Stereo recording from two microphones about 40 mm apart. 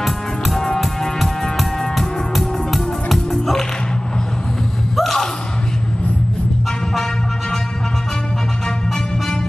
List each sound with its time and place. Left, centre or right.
0.0 s music: centre
4.9 s a sound: centre
8.6 s music: centre